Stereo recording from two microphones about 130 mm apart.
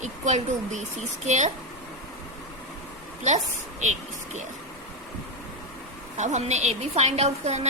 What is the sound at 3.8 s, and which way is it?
Speech, 65° right (ahead or behind).